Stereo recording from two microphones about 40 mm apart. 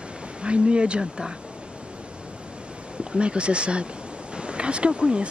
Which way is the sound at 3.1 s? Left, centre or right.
Right.